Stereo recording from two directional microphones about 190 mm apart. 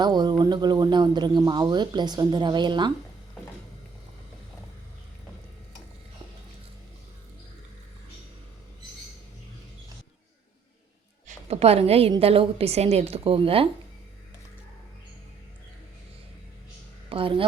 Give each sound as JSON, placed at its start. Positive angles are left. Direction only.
{"t": 0.0, "sound": "speech", "side_deg": -20}
{"t": 11.3, "sound": "a woman's voice", "side_deg": -35}
{"t": 17.1, "sound": "a woman's voice", "side_deg": -30}